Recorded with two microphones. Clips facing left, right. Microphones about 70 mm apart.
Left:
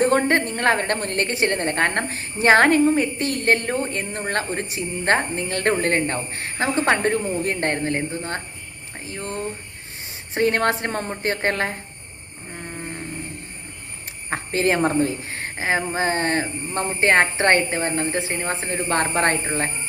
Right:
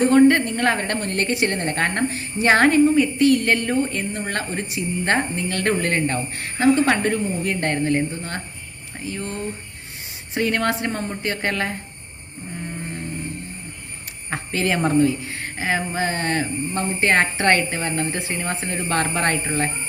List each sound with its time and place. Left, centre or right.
0.0 s speech: left
14.3 s speech: left